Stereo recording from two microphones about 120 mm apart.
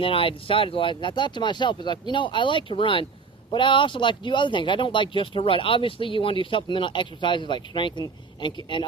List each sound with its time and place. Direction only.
0.0 s speech: 50° left (ahead or behind)